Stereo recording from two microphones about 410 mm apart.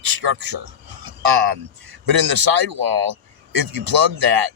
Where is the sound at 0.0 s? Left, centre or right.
Right.